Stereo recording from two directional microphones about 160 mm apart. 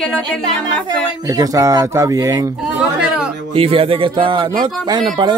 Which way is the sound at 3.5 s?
35° right (ahead or behind).